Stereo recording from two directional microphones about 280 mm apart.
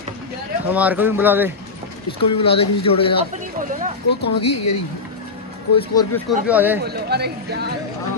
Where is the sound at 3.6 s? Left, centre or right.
Right.